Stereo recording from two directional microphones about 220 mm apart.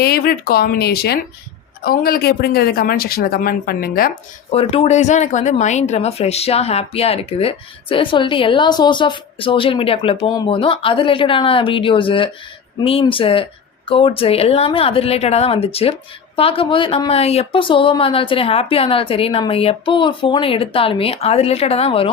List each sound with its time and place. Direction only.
0.0 s speech: 45° left (ahead or behind)
4.5 s speech: 25° left (ahead or behind)